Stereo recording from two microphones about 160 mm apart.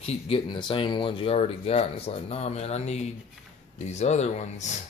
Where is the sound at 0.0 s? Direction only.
35° left (ahead or behind).